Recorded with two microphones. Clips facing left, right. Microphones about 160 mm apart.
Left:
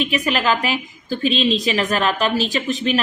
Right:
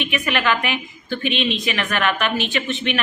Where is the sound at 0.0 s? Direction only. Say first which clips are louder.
Left 2 dB; 35° left (ahead or behind).